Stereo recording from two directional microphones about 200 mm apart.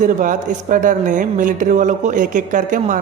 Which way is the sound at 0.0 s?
40° right (ahead or behind).